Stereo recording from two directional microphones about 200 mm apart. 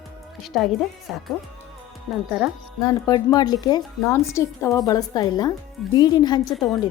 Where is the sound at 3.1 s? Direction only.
20° left (ahead or behind).